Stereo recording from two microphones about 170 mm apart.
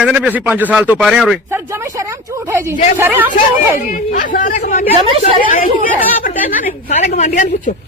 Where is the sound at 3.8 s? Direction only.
50° left (ahead or behind).